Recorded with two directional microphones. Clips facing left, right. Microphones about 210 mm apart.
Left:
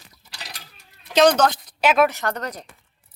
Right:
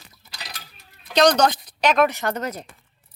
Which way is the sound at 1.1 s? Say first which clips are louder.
Left 1 dB; 5° left (ahead or behind).